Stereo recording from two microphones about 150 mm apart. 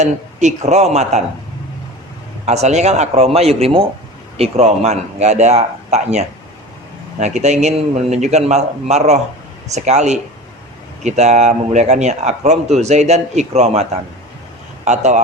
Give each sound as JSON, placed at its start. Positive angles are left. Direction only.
{"t": 0.0, "sound": "speech", "side_deg": -50}
{"t": 2.5, "sound": "speech", "side_deg": -50}